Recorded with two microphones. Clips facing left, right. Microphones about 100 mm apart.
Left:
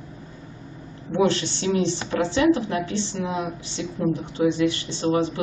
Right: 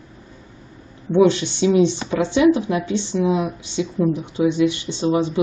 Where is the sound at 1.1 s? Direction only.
20° right (ahead or behind).